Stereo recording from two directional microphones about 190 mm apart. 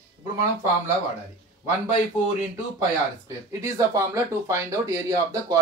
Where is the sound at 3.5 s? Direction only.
15° right (ahead or behind).